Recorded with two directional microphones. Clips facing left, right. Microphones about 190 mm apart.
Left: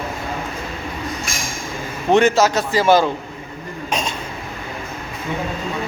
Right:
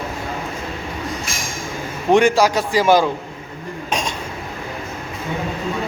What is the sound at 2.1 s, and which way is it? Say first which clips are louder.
Speech: even; 10° right (ahead or behind).